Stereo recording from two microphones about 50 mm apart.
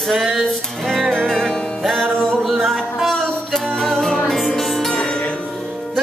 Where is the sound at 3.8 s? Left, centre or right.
Centre.